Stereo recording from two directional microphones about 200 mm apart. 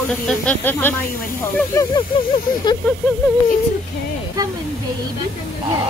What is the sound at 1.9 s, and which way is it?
Snake, 25° left (ahead or behind).